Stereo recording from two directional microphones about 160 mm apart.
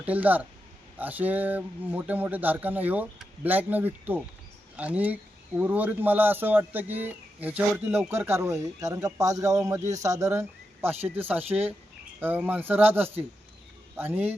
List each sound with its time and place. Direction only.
0.0 s speech: 10° right (ahead or behind)